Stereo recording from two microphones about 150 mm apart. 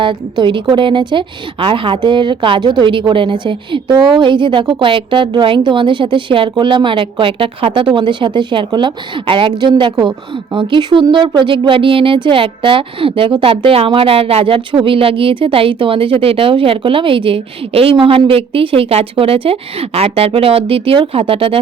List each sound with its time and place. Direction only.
0.0 s a woman's voice: 35° right (ahead or behind)